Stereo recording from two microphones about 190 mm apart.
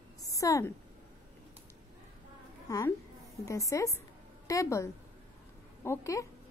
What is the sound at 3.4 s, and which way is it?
A woman's voice, 15° left (ahead or behind).